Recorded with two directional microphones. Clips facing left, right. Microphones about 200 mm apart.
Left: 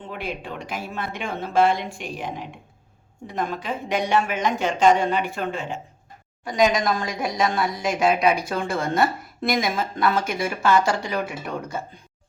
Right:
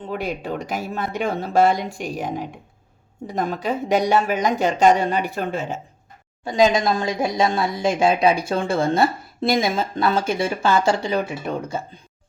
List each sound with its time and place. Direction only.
0.1 s speech: 40° right (ahead or behind)
6.4 s speech: 25° right (ahead or behind)